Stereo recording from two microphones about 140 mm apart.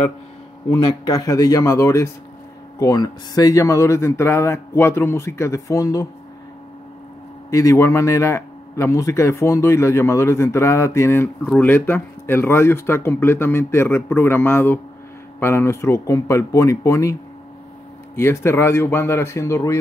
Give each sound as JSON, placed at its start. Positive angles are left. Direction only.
{"t": 0.8, "sound": "speech", "side_deg": 25}
{"t": 7.5, "sound": "speech", "side_deg": 20}